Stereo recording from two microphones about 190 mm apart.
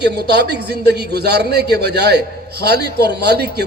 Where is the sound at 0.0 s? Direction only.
60° right (ahead or behind).